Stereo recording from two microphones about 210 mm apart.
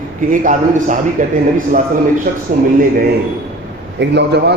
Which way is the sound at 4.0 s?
55° right (ahead or behind).